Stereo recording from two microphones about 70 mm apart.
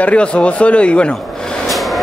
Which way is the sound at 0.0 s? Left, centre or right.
Centre.